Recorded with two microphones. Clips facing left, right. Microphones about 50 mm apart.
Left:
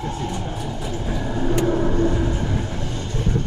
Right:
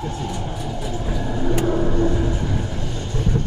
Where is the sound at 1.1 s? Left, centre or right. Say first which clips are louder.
Even; left.